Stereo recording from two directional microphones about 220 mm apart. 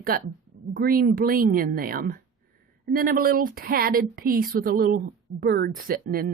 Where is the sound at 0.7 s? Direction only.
40° right (ahead or behind).